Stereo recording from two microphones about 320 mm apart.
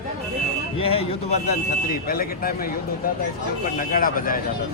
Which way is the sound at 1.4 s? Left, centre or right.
Left.